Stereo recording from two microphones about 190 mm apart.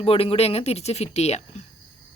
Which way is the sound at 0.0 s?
30° left (ahead or behind).